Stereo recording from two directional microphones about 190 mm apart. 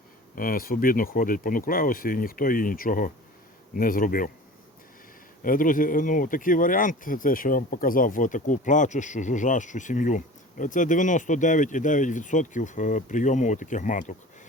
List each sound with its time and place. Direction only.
0.3 s speech: 50° left (ahead or behind)
5.4 s speech: 45° left (ahead or behind)